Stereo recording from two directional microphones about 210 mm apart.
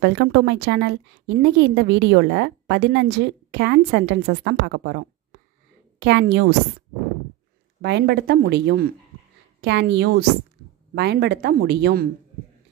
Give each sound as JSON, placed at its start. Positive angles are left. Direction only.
{"t": 0.0, "sound": "a woman's voice", "side_deg": -55}
{"t": 7.8, "sound": "speech", "side_deg": -55}